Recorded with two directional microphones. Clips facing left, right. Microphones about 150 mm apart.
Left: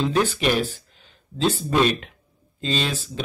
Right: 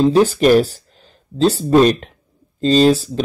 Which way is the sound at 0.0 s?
40° right (ahead or behind).